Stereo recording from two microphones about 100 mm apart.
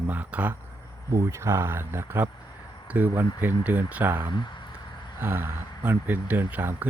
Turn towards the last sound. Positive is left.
turn(degrees=-20)  # may be behind; listen again after turning